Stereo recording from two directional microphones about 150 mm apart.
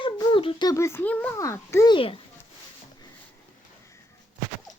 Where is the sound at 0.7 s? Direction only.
20° left (ahead or behind).